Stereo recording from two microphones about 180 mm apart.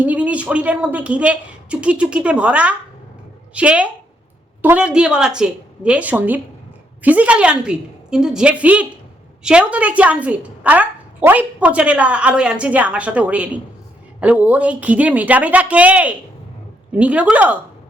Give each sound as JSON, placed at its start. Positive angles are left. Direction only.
{"t": 0.0, "sound": "a woman's voice", "side_deg": -5}